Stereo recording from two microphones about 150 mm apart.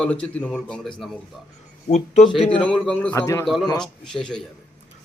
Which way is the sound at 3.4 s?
Centre (ahead or behind).